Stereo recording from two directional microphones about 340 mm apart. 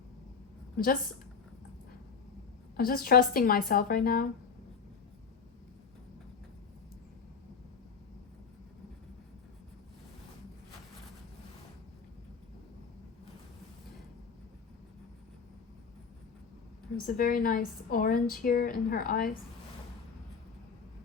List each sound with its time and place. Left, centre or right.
0.8 s a woman's voice: left
2.7 s a woman's voice: left
17.2 s a woman's voice: left